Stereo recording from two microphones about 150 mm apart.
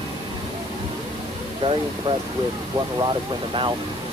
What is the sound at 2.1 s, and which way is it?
Speech, 30° right (ahead or behind).